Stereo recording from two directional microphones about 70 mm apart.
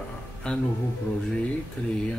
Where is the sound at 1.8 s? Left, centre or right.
Centre.